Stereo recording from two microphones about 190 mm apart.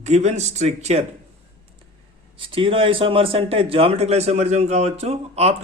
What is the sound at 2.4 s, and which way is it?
A man's voice, 30° right (ahead or behind).